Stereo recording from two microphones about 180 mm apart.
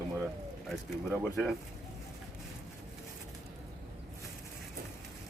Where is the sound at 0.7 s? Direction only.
Centre (ahead or behind).